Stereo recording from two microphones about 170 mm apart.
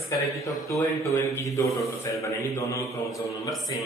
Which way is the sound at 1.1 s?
15° left (ahead or behind).